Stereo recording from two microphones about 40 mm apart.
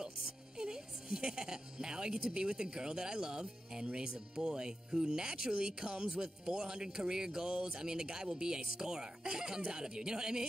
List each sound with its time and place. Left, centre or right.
0.0 s a woman's voice: centre